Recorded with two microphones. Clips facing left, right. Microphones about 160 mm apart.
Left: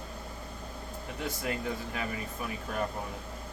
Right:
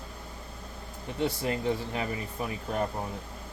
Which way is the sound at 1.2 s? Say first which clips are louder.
Right 6 dB; 30° right (ahead or behind).